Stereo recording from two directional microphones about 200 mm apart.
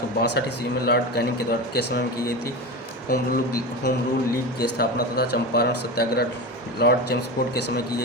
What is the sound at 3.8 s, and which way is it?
Speech, 50° left (ahead or behind).